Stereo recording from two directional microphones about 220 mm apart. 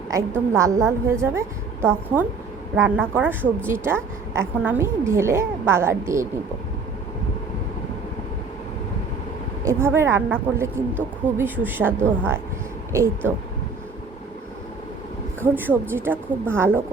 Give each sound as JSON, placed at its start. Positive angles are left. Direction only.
{"t": 0.1, "sound": "a woman's voice", "side_deg": -15}
{"t": 9.6, "sound": "a woman's voice", "side_deg": -10}
{"t": 15.4, "sound": "a woman's voice", "side_deg": -10}